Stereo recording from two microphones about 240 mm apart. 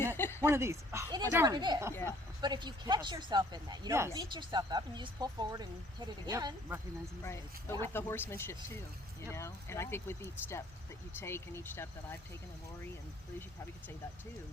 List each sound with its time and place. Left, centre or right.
0.2 s speech: centre
0.4 s speech: centre
1.9 s speech: centre
2.4 s speech: centre
7.3 s speech: centre